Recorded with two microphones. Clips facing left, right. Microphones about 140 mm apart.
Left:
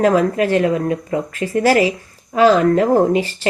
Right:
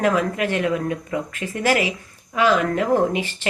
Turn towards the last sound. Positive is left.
turn(degrees=35)  # may be behind; listen again after turning